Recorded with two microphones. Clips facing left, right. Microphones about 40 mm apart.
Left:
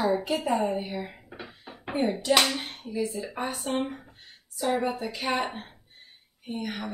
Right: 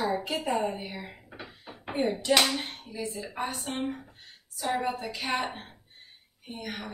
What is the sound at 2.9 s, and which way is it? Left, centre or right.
Speech, centre.